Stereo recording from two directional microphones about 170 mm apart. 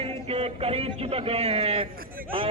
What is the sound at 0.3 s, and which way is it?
A man's voice, 35° right (ahead or behind).